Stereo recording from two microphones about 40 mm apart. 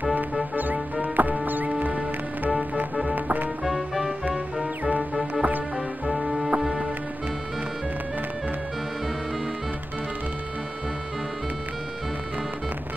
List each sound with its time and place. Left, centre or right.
1.0 s music: right
1.8 s music: right
3.2 s music: right
3.6 s music: centre
5.3 s music: right
6.1 s music: centre